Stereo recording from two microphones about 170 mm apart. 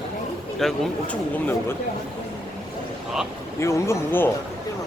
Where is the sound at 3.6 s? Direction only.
15° left (ahead or behind).